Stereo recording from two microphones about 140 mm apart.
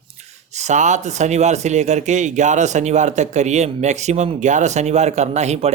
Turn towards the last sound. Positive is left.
turn(degrees=-55)  # may be behind; listen again after turning